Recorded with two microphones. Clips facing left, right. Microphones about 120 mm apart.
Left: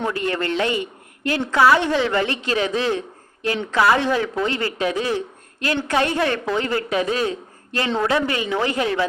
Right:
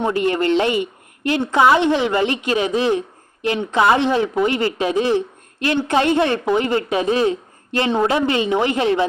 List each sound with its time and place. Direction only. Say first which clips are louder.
0.0 s a woman's voice: right 5 dB; 20° right (ahead or behind)